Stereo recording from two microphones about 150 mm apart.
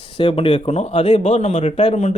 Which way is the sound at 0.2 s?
40° left (ahead or behind).